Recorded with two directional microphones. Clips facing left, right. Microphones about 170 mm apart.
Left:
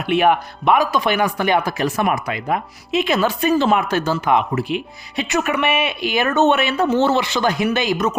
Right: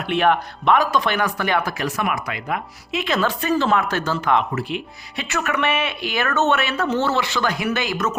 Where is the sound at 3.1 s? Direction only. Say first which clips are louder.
Left 2 dB; 10° left (ahead or behind).